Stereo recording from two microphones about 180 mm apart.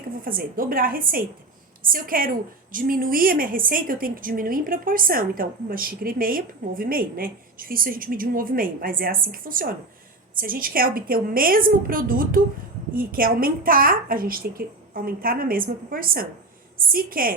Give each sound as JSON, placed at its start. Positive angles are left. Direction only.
{"t": 0.2, "sound": "a woman's voice", "side_deg": -50}